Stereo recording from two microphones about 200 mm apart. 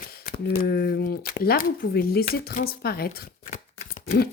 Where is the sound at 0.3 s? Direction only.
45° left (ahead or behind).